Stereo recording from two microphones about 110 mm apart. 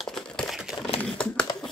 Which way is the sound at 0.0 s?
Centre (ahead or behind).